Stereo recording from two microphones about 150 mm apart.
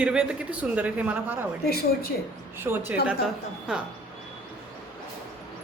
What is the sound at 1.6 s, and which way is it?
Speech, 85° left.